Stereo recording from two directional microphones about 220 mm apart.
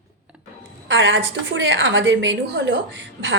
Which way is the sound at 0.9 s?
55° right (ahead or behind).